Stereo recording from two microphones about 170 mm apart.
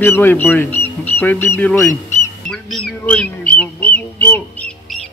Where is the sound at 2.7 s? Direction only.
5° left (ahead or behind).